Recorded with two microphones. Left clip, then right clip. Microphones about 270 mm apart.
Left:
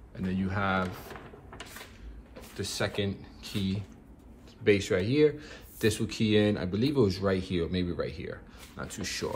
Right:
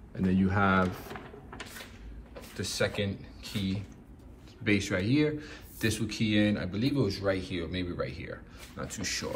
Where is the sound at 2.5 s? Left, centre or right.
Centre.